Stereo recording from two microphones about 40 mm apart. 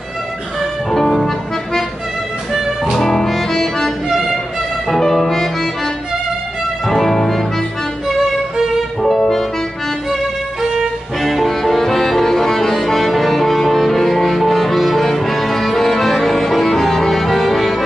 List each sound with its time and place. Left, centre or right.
0.8 s music: centre
2.5 s music: centre
6.9 s music: centre
9.0 s music: centre
11.1 s music: centre